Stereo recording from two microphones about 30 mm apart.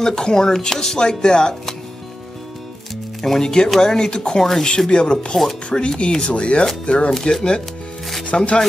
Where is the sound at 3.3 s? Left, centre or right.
Left.